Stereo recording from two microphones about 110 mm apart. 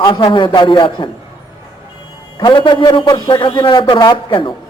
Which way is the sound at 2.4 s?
45° left (ahead or behind).